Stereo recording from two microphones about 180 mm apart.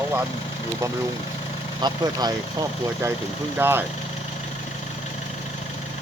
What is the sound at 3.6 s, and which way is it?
Speech, 15° right (ahead or behind).